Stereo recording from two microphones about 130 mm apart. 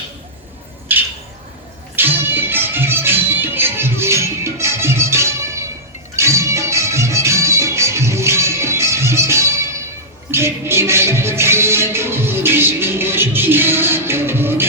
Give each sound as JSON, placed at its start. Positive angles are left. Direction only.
{"t": 0.9, "sound": "bird", "side_deg": -15}
{"t": 2.0, "sound": "music", "side_deg": -15}